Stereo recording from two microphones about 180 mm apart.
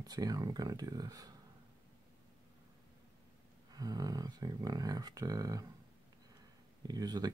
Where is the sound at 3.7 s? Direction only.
20° right (ahead or behind).